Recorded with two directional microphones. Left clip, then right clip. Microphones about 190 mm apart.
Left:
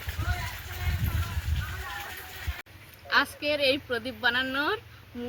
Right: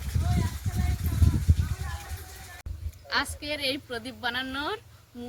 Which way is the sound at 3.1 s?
25° right (ahead or behind).